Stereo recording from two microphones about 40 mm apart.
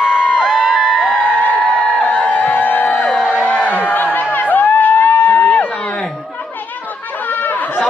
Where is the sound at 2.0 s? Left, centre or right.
Left.